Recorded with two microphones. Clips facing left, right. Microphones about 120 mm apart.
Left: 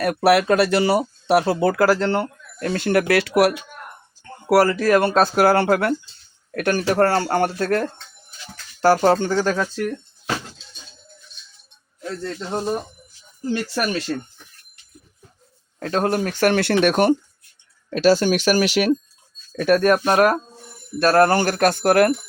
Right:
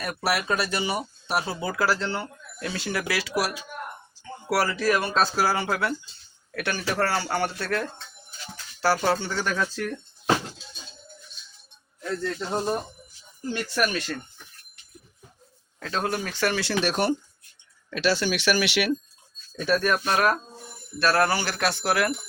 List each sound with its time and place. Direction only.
0.0 s speech: 60° left (ahead or behind)
4.4 s speech: 50° left (ahead or behind); by 9.9 s 30° left (ahead or behind)
12.5 s speech: centre (ahead or behind)
13.7 s speech: 30° left (ahead or behind)
15.8 s speech: 50° left (ahead or behind)
17.9 s speech: 45° left (ahead or behind)
19.5 s speech: 55° left (ahead or behind)